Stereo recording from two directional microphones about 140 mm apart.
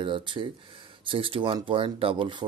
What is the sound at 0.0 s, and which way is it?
Speech, 35° right (ahead or behind).